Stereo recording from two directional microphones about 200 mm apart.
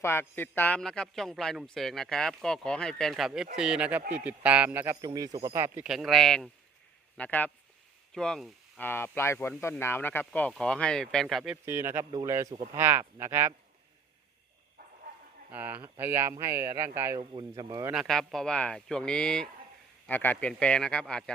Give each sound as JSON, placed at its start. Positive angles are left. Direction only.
{"t": 0.0, "sound": "a man's voice", "side_deg": 10}
{"t": 11.5, "sound": "a man's voice", "side_deg": -10}
{"t": 15.5, "sound": "a man's voice", "side_deg": -10}
{"t": 17.9, "sound": "a man's voice", "side_deg": 0}